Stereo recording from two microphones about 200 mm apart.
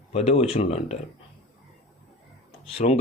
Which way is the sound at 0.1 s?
30° left (ahead or behind).